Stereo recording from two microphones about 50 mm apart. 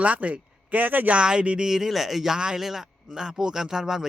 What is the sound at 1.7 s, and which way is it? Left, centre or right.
Speech, centre.